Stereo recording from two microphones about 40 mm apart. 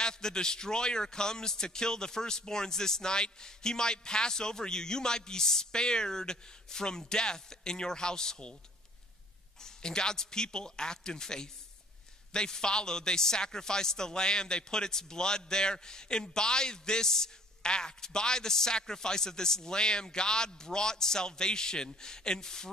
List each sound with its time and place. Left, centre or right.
0.0 s a man's voice: centre
9.6 s a man's voice: centre